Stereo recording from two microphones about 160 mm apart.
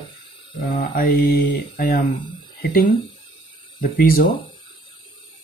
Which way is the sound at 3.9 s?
75° left (ahead or behind).